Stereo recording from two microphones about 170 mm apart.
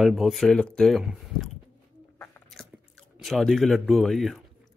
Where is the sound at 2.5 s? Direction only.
Centre (ahead or behind).